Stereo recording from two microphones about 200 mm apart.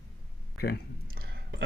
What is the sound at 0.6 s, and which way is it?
Speech, 50° left (ahead or behind).